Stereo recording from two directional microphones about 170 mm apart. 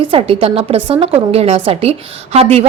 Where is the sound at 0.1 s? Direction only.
35° right (ahead or behind).